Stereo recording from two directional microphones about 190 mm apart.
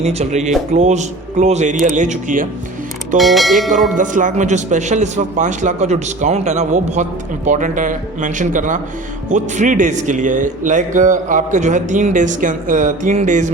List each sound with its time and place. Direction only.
0.0 s speech: 35° right (ahead or behind)
3.2 s speech: centre (ahead or behind)
3.9 s a man's voice: 45° right (ahead or behind)